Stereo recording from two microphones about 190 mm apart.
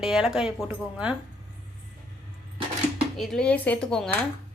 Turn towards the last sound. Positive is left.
turn(degrees=5)  # may be behind; listen again after turning